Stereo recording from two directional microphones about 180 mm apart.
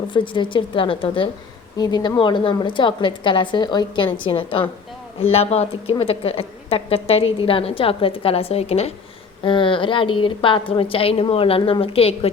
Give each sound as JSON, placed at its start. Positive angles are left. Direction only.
{"t": 0.1, "sound": "a woman's voice", "side_deg": 25}